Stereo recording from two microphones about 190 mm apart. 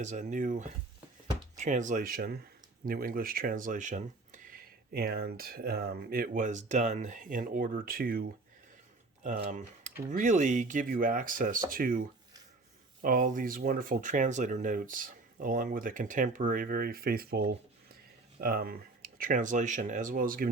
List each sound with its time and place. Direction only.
0.0 s speech: 40° right (ahead or behind)